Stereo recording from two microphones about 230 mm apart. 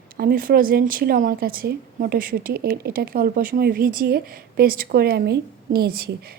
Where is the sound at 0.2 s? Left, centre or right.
Right.